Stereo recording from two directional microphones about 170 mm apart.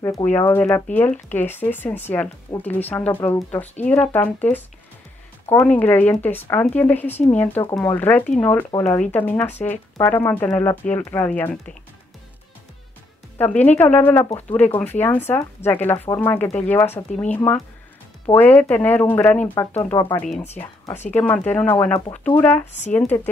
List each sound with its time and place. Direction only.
0.0 s speech: 15° left (ahead or behind)
5.6 s speech: 10° left (ahead or behind)
13.4 s speech: 10° left (ahead or behind)
19.9 s speech: 20° left (ahead or behind)
20.2 s speech: 40° left (ahead or behind)
20.5 s speech: 15° left (ahead or behind)